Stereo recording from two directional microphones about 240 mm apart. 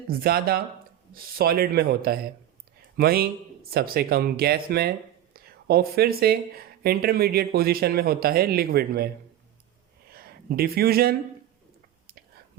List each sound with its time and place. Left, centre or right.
0.1 s speech: right
10.1 s speech: right